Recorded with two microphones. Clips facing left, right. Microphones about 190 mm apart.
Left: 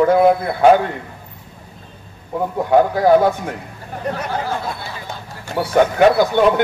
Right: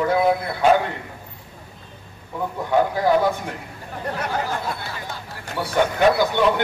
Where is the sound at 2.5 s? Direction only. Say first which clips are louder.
Left 5 dB; 50° left (ahead or behind).